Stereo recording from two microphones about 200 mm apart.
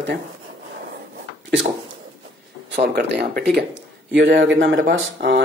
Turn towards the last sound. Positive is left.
turn(degrees=-65)  # may be behind; listen again after turning